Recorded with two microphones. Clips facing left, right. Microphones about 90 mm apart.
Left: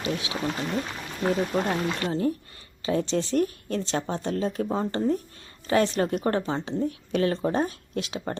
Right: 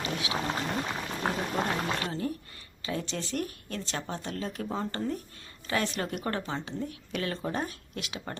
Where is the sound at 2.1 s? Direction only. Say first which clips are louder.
Left 7 dB; 30° left (ahead or behind).